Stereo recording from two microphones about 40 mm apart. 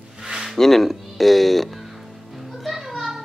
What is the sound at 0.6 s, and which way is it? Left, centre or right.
Speech, centre.